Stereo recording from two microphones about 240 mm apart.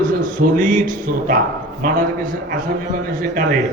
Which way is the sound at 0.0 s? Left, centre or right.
Right.